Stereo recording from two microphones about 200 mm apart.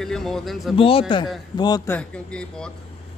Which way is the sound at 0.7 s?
30° left (ahead or behind).